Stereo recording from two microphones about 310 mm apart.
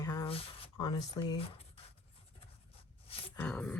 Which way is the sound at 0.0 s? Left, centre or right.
Centre.